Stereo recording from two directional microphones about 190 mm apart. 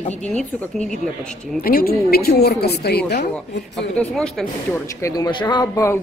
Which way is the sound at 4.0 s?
5° left (ahead or behind).